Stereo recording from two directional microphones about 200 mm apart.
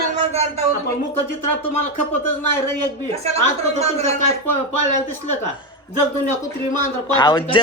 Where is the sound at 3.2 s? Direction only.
30° right (ahead or behind).